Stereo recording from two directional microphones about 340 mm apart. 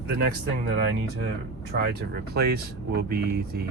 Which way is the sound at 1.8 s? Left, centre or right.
Right.